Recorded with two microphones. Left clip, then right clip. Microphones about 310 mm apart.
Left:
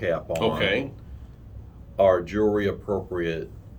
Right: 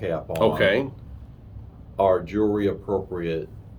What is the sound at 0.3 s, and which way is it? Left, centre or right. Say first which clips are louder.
Speech: right 7 dB; centre.